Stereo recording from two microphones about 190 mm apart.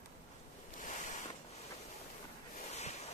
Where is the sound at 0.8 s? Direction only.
40° left (ahead or behind).